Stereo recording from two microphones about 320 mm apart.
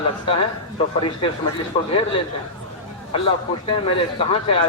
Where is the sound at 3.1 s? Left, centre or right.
Centre.